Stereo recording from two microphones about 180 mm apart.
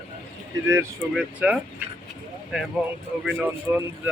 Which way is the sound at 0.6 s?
15° right (ahead or behind).